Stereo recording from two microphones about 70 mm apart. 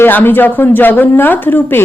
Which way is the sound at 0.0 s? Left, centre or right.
Left.